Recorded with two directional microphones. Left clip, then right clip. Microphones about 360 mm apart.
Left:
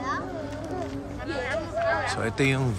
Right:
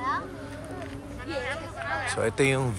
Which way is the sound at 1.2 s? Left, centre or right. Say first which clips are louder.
Left 3 dB; centre.